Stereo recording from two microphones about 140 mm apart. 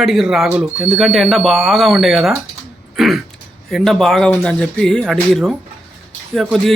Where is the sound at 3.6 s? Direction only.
5° left (ahead or behind).